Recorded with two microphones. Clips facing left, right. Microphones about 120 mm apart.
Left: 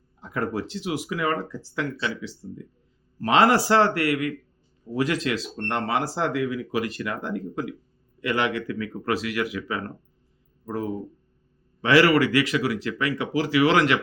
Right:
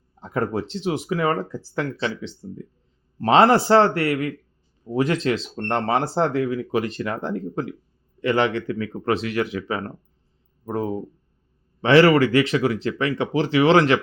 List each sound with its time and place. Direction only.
0.2 s speech: 25° right (ahead or behind)
2.0 s speech: 25° right (ahead or behind)